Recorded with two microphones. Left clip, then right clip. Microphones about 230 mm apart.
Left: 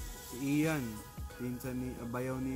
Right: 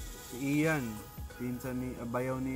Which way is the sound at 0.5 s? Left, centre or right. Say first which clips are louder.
Right 2 dB; centre.